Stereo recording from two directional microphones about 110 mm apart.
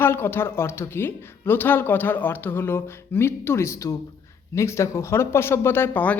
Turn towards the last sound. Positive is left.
turn(degrees=15)  # may be behind; listen again after turning